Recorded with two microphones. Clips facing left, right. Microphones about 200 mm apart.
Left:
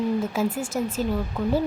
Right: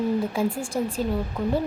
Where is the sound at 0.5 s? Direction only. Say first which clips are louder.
Left 1 dB; 5° left (ahead or behind).